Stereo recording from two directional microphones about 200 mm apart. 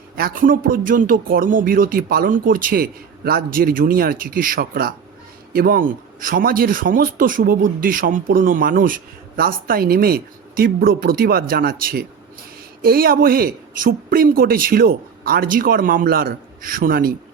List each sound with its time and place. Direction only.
0.2 s a man's voice: 45° right (ahead or behind)